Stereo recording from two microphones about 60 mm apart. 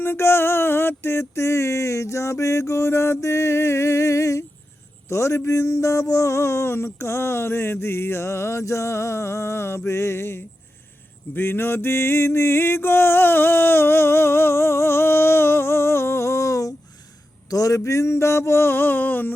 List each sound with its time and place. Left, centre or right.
0.0 s music: left
5.0 s a man's voice: left
5.5 s music: left
17.5 s speech: left
17.7 s music: left